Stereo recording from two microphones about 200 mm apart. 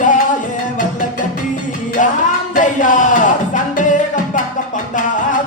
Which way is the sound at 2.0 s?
40° left (ahead or behind).